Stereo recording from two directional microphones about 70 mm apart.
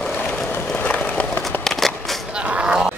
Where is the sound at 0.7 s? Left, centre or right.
Left.